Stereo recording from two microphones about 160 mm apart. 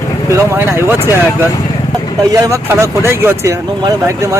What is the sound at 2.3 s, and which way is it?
Speech, 20° right (ahead or behind).